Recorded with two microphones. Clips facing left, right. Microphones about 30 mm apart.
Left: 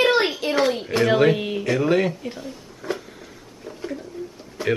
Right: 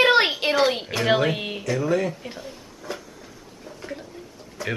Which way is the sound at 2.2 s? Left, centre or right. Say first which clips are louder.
Left 4 dB; centre.